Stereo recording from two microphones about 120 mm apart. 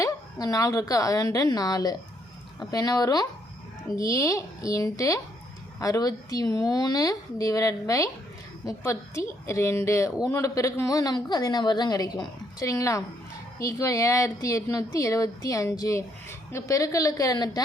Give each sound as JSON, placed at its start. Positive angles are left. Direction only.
{"t": 0.0, "sound": "a woman's voice", "side_deg": 30}